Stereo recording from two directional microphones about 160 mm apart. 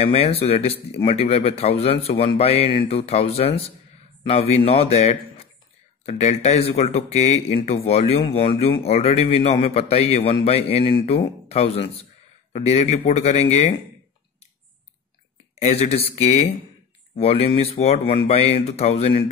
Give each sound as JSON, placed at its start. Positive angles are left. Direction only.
{"t": 0.0, "sound": "a man's voice", "side_deg": 40}
{"t": 15.6, "sound": "speech", "side_deg": 40}